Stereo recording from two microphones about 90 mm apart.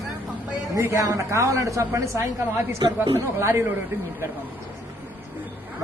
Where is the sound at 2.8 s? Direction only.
55° right (ahead or behind).